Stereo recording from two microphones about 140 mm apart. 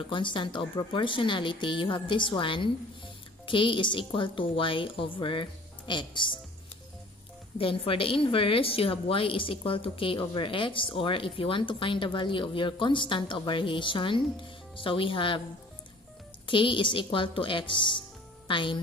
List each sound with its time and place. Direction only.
0.0 s a woman's voice: 35° left (ahead or behind)
7.5 s a woman's voice: 40° left (ahead or behind)
16.4 s a woman's voice: 35° left (ahead or behind)